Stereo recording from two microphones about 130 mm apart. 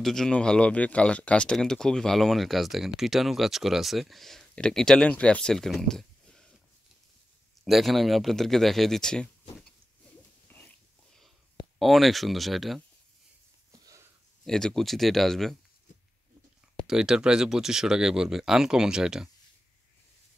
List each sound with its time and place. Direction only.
0.0 s speech: 5° left (ahead or behind)
7.6 s speech: centre (ahead or behind)
10.5 s dog: 15° left (ahead or behind)
11.8 s speech: centre (ahead or behind)
13.7 s a sound: 25° right (ahead or behind)
14.4 s speech: 5° left (ahead or behind)
15.9 s a sound: 75° left (ahead or behind)
16.8 s speech: 5° right (ahead or behind)